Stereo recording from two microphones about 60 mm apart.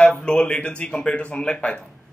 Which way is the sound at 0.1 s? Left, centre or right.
Centre.